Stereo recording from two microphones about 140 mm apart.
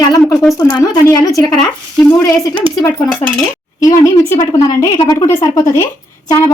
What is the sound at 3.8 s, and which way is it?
A woman's voice, 25° left (ahead or behind).